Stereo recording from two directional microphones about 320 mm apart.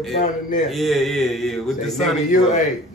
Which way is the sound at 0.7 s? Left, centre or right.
Centre.